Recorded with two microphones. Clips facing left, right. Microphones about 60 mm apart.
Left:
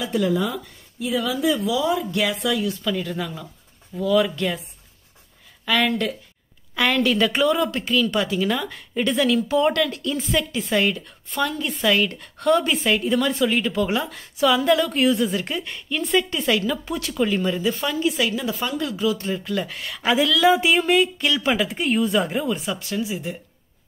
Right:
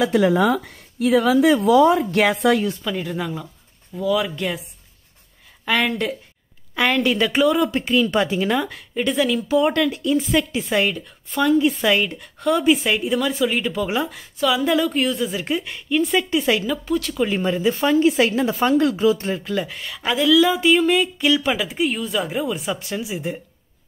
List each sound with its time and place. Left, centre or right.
0.0 s speech: right
2.8 s a woman's voice: centre
5.9 s speech: centre
7.7 s speech: centre
8.7 s a woman's voice: centre
11.5 s speech: centre
12.2 s a woman's voice: centre
16.6 s a woman's voice: centre
17.3 s speech: centre
19.3 s a woman's voice: centre
22.6 s speech: right